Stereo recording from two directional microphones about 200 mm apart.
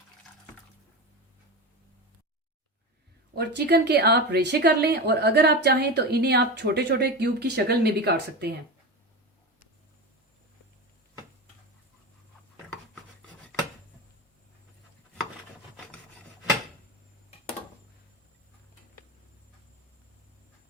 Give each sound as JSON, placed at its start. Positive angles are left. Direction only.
{"t": 3.3, "sound": "a woman's voice", "side_deg": -55}